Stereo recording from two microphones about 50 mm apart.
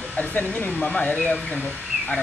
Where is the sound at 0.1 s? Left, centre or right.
Left.